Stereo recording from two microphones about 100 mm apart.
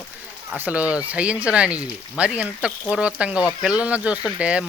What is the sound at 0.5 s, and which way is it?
Speech, 15° right (ahead or behind).